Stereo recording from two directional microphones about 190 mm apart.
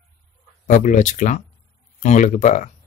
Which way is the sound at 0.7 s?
40° left (ahead or behind).